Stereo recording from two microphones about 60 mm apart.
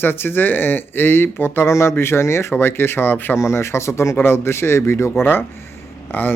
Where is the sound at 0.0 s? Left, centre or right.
Left.